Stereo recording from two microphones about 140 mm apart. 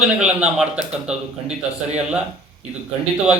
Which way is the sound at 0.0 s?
10° right (ahead or behind).